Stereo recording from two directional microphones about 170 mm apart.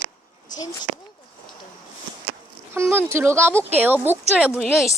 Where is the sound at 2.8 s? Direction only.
15° right (ahead or behind).